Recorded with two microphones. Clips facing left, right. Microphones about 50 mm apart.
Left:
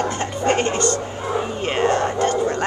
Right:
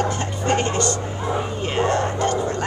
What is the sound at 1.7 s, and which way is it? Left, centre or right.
Whispering, left.